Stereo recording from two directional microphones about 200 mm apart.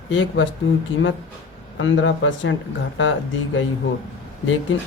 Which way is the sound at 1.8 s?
70° left (ahead or behind).